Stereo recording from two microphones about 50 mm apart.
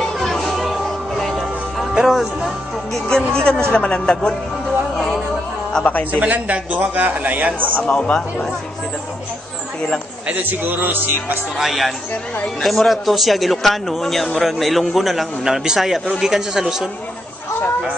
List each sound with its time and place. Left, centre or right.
0.2 s music: centre
3.1 s speech: centre
4.9 s a sound: centre
6.1 s a man's voice: right
7.7 s speech: left
8.0 s speech: centre
10.2 s a man's voice: right
10.6 s a man's voice: right
11.5 s a man's voice: centre